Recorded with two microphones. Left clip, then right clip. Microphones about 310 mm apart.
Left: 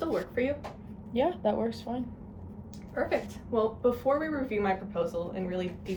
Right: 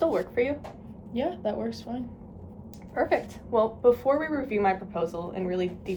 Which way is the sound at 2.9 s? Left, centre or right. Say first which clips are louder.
Right 4 dB; centre.